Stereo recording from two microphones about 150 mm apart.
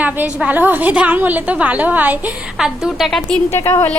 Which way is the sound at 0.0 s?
10° right (ahead or behind).